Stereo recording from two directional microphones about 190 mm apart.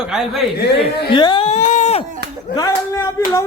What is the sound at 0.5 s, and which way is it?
Speech, 60° left (ahead or behind).